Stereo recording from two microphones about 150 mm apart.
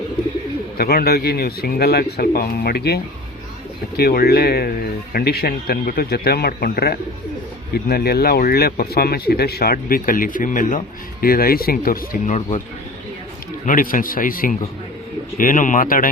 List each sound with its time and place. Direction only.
0.8 s speech: 90° left; by 10.8 s 60° left (ahead or behind)
11.2 s speech: 80° left
12.2 s speech: 55° left (ahead or behind)
13.7 s speech: 65° left (ahead or behind)